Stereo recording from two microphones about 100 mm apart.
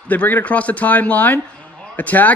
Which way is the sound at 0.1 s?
15° left (ahead or behind).